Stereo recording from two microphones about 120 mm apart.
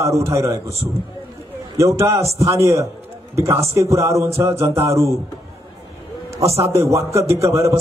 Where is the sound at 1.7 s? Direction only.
25° right (ahead or behind).